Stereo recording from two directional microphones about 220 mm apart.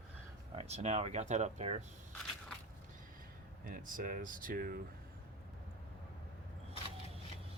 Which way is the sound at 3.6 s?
40° right (ahead or behind).